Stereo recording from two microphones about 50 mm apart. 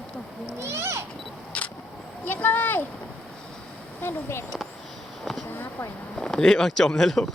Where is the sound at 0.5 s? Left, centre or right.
Right.